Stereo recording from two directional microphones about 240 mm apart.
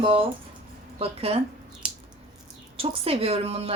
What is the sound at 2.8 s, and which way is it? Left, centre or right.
Speech, right.